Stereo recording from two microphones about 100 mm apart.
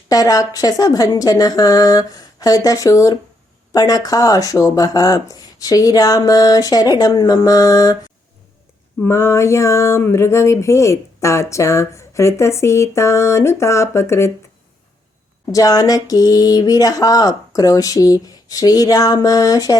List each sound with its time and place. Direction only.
0.1 s speech: 40° left (ahead or behind)
9.0 s a sound: 25° left (ahead or behind)
15.5 s speech: 35° left (ahead or behind)